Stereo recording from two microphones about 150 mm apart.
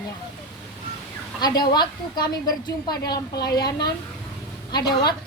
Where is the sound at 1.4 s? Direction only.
30° left (ahead or behind).